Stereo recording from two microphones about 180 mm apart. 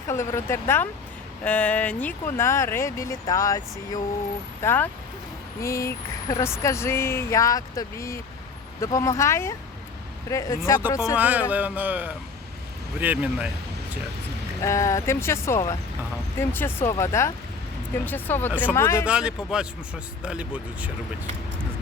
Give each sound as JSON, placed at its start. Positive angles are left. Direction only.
{"t": 0.1, "sound": "speech", "side_deg": 15}
{"t": 11.2, "sound": "speech", "side_deg": -10}
{"t": 14.6, "sound": "speech", "side_deg": 15}
{"t": 19.0, "sound": "speech", "side_deg": -5}